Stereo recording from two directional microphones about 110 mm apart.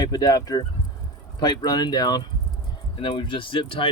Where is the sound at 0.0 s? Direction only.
35° left (ahead or behind).